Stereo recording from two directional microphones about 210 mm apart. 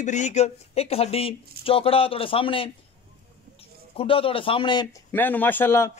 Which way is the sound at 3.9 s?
25° left (ahead or behind).